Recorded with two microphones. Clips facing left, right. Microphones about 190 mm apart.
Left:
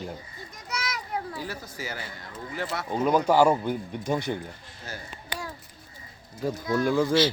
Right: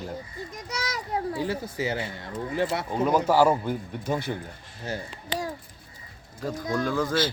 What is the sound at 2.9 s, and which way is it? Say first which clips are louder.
Speech: left 1 dB; 5° right (ahead or behind).